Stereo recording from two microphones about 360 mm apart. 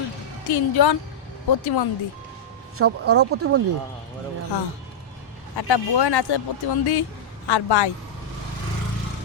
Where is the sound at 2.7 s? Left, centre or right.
Right.